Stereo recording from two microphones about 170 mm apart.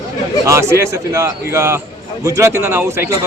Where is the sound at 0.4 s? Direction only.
15° right (ahead or behind).